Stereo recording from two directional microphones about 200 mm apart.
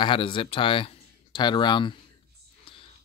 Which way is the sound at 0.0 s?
25° left (ahead or behind).